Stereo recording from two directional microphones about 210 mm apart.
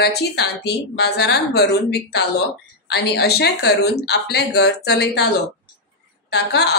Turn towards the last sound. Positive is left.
turn(degrees=50)  # may be behind; listen again after turning